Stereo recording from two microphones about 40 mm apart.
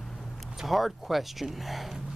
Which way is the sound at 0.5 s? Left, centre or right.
Centre.